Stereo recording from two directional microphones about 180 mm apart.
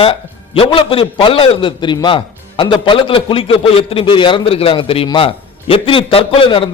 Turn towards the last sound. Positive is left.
turn(degrees=30)  # may be behind; listen again after turning